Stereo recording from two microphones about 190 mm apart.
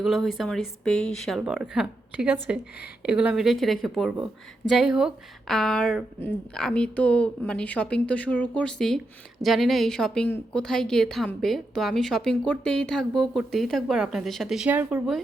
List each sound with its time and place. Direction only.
0.0 s a woman's voice: centre (ahead or behind)